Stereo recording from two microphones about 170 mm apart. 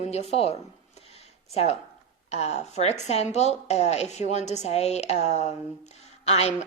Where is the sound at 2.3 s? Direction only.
40° left (ahead or behind).